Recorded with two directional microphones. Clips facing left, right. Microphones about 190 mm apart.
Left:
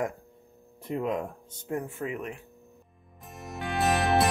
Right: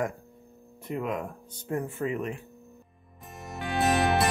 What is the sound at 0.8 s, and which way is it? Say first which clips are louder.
Speech: left 2 dB; 30° left (ahead or behind).